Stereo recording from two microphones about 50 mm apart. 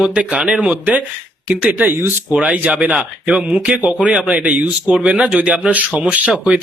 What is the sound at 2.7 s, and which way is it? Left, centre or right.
Speech, right.